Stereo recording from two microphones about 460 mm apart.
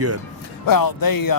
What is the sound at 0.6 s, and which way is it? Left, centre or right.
Speech, left.